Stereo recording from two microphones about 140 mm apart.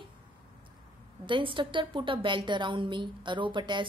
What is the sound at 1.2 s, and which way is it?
A woman's voice, 35° right (ahead or behind).